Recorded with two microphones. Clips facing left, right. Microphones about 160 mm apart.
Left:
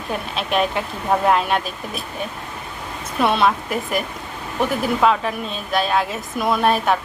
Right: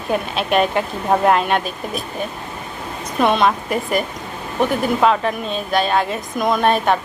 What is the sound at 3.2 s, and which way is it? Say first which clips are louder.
Speech: right 2 dB; 5° left (ahead or behind).